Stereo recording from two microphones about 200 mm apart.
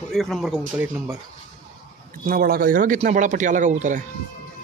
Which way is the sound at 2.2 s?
45° right (ahead or behind).